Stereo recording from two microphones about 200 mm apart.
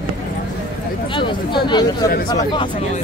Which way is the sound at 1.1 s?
25° left (ahead or behind).